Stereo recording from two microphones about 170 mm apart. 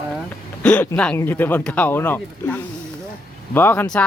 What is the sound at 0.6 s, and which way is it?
Speech, 5° left (ahead or behind).